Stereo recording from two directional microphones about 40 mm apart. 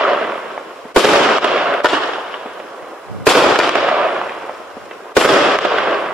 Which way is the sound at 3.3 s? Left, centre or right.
Centre.